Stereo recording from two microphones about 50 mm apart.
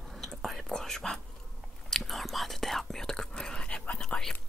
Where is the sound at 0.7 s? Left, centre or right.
Centre.